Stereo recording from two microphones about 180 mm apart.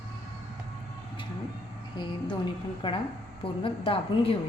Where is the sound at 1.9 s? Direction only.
25° left (ahead or behind).